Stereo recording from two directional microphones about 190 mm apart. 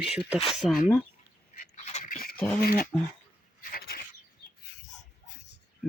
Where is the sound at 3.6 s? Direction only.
50° left (ahead or behind).